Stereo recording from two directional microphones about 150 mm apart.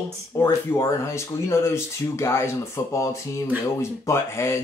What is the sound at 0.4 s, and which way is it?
Speech, 20° left (ahead or behind).